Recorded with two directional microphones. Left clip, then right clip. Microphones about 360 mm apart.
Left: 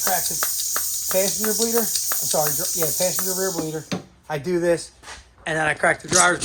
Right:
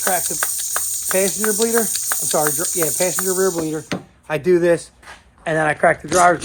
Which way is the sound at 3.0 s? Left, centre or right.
Right.